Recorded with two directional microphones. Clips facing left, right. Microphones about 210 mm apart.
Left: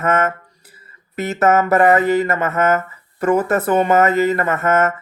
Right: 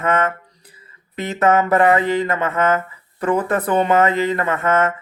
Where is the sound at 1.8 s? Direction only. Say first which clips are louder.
Left 3 dB; 45° left (ahead or behind).